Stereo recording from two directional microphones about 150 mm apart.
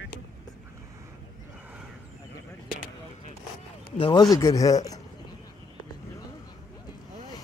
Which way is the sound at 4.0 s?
30° left (ahead or behind).